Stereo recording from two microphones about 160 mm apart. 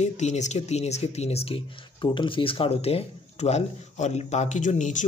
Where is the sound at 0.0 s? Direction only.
45° left (ahead or behind).